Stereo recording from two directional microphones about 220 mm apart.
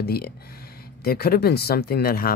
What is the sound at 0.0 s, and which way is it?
Speech, 45° left (ahead or behind).